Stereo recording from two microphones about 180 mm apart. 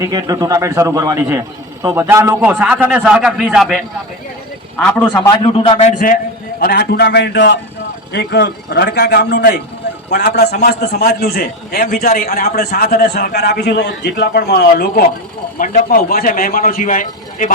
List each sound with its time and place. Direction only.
0.0 s a man's voice: 20° right (ahead or behind); by 3.8 s centre (ahead or behind)
5.0 s a man's voice: 20° left (ahead or behind)
6.6 s a man's voice: 60° left (ahead or behind); by 7.6 s 85° left
8.1 s a man's voice: 65° left (ahead or behind)
15.5 s a man's voice: 45° left (ahead or behind)